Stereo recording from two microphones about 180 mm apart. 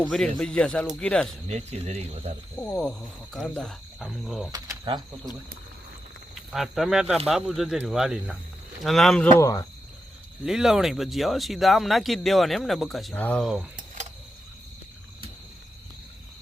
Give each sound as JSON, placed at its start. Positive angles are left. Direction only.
{"t": 0.0, "sound": "speech", "side_deg": 5}
{"t": 1.5, "sound": "speech", "side_deg": -35}
{"t": 2.6, "sound": "speech", "side_deg": 5}
{"t": 4.5, "sound": "speech", "side_deg": -20}
{"t": 6.5, "sound": "speech", "side_deg": 0}
{"t": 9.4, "sound": "speech", "side_deg": 20}
{"t": 10.4, "sound": "speech", "side_deg": -5}